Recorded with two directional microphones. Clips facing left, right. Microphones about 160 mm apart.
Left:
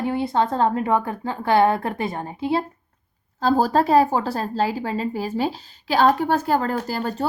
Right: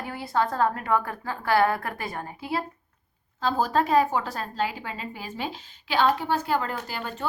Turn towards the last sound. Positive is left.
turn(degrees=40)  # may be behind; listen again after turning